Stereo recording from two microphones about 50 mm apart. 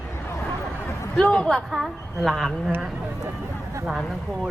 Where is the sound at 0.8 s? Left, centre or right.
Left.